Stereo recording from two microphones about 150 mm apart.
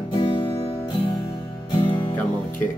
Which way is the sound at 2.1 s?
10° left (ahead or behind).